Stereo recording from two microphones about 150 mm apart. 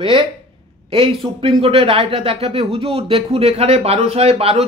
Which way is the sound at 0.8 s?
35° right (ahead or behind).